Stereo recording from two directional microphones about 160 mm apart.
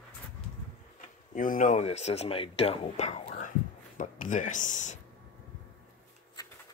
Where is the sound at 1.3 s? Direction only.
55° left (ahead or behind).